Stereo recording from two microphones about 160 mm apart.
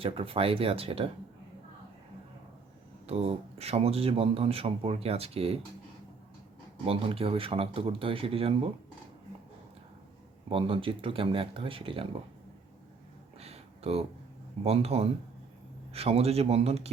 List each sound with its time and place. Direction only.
0.0 s speech: 35° right (ahead or behind)
3.1 s speech: 40° right (ahead or behind)
6.8 s speech: 35° right (ahead or behind)
10.5 s speech: 35° right (ahead or behind)
13.4 s a sound: 40° right (ahead or behind)
14.6 s speech: 40° right (ahead or behind)